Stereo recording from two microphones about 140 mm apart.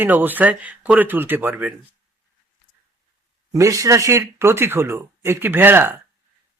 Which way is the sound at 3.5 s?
25° right (ahead or behind).